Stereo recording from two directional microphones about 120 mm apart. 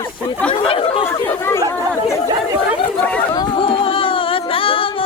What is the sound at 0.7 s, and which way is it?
Chatter, 50° left (ahead or behind).